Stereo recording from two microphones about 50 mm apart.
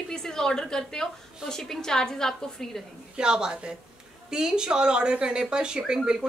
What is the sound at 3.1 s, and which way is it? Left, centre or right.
Speech, centre.